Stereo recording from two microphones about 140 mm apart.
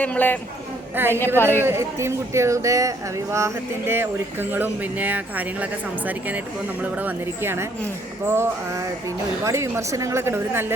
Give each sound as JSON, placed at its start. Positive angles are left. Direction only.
{"t": 0.0, "sound": "a man's voice", "side_deg": 10}
{"t": 0.9, "sound": "speech", "side_deg": -15}